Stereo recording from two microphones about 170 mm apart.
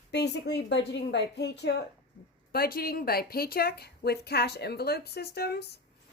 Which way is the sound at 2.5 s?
65° left (ahead or behind).